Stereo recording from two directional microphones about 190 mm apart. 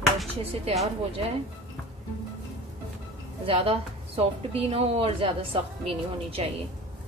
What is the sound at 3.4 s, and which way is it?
A woman's voice, 30° right (ahead or behind).